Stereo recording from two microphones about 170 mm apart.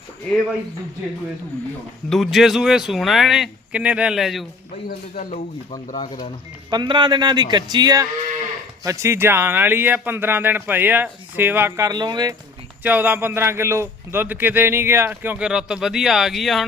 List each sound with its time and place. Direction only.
2.0 s a man's voice: centre (ahead or behind)
4.9 s speech: 60° left (ahead or behind)
5.3 s speech: 45° left (ahead or behind)
6.7 s a man's voice: 25° right (ahead or behind)
12.8 s a man's voice: 10° right (ahead or behind)